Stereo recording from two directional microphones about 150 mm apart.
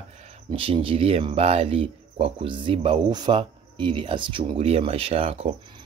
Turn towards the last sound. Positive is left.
turn(degrees=-40)  # may be behind; listen again after turning